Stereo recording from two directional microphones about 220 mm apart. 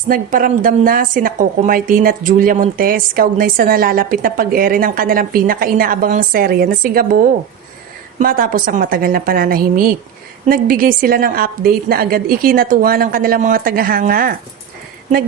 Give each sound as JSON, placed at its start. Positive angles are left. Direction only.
{"t": 0.1, "sound": "a woman's voice", "side_deg": -40}
{"t": 8.2, "sound": "a woman's voice", "side_deg": -40}